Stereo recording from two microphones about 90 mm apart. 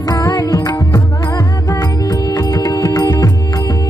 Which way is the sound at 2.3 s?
45° left (ahead or behind).